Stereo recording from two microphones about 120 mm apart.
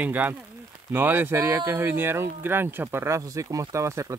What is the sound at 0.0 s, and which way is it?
Speech, 15° right (ahead or behind).